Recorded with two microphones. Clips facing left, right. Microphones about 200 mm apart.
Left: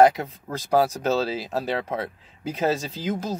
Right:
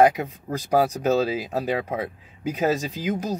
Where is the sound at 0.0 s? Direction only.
15° right (ahead or behind).